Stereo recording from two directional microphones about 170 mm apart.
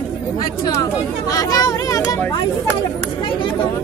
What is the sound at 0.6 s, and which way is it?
Speech, 20° left (ahead or behind).